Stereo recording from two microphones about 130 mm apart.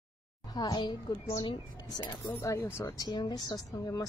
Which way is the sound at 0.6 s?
35° left (ahead or behind).